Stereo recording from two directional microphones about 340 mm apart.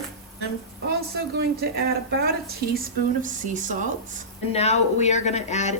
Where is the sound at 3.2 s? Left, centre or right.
Right.